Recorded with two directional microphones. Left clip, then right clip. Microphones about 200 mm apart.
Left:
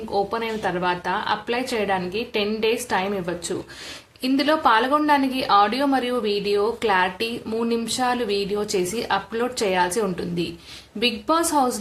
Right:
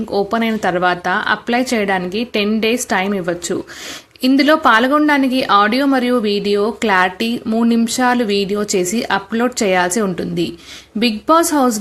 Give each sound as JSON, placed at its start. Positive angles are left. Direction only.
{"t": 0.1, "sound": "a woman's voice", "side_deg": -30}